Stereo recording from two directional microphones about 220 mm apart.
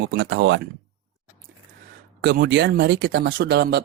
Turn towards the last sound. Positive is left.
turn(degrees=-50)  # may be behind; listen again after turning